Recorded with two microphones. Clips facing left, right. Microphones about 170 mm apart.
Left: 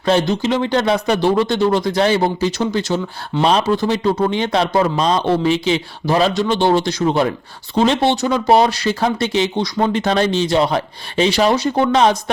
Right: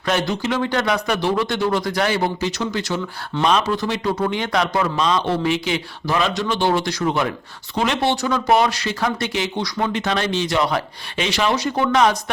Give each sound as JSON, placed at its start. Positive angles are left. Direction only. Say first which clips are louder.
{"t": 0.0, "sound": "speech", "louder": "left 5 dB", "side_deg": 30}
{"t": 8.5, "sound": "speech", "louder": "left 4 dB", "side_deg": 35}